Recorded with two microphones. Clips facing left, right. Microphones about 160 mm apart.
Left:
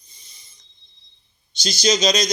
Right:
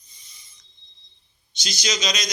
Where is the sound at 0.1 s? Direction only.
30° left (ahead or behind).